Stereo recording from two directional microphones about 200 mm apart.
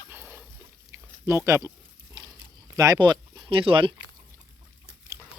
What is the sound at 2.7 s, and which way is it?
Speech, 15° right (ahead or behind).